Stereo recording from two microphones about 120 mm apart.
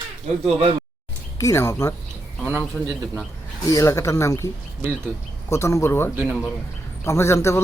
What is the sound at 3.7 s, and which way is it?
Speech, 25° left (ahead or behind).